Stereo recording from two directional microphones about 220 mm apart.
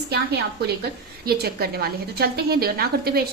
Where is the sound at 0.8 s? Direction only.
45° right (ahead or behind).